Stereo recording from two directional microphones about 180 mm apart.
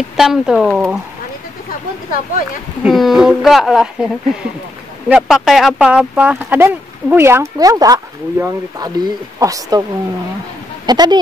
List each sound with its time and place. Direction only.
0.2 s speech: 5° right (ahead or behind)
2.0 s speech: 50° left (ahead or behind)
2.8 s speech: centre (ahead or behind); by 9.8 s 20° right (ahead or behind)
10.9 s speech: 25° right (ahead or behind)